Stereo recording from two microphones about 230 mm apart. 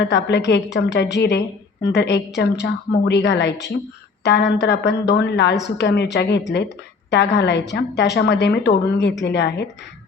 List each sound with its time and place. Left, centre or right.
0.0 s a woman's voice: left